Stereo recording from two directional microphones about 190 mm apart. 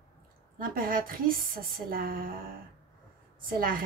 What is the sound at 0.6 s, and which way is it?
Speech, 50° right (ahead or behind).